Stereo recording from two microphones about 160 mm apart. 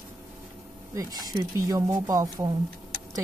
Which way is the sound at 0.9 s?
20° right (ahead or behind).